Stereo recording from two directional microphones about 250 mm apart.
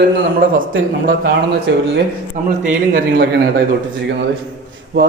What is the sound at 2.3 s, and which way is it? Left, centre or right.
Speech, right.